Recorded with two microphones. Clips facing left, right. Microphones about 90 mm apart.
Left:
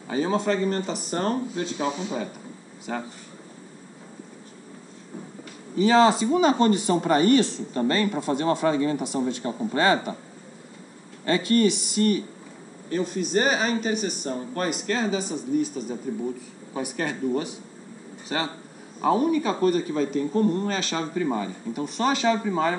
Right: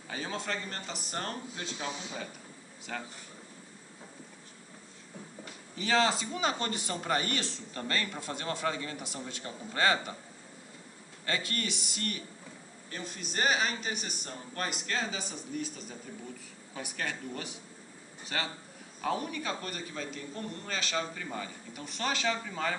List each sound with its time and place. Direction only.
0.1 s a man's voice: 25° left (ahead or behind)
2.9 s speech: 20° left (ahead or behind)
5.8 s speech: 25° left (ahead or behind)
6.3 s a man's voice: 35° left (ahead or behind)
9.0 s speech: 20° left (ahead or behind)
9.5 s a man's voice: 35° left (ahead or behind)
11.2 s speech: 30° left (ahead or behind)
15.2 s speech: 10° left (ahead or behind)
16.1 s a man's voice: 25° left (ahead or behind)